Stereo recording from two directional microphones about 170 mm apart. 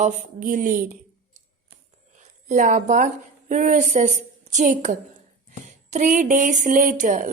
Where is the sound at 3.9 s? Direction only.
45° right (ahead or behind).